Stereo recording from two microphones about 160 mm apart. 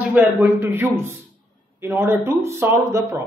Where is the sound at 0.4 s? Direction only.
15° right (ahead or behind).